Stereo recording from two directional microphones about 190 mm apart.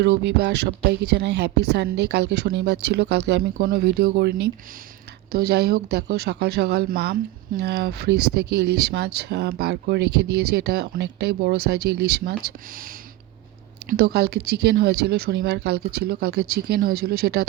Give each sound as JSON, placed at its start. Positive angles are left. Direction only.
{"t": 0.0, "sound": "speech", "side_deg": -60}
{"t": 13.9, "sound": "speech", "side_deg": -60}